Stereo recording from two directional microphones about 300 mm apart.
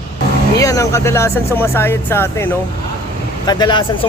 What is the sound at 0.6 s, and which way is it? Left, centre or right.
A man's voice, centre.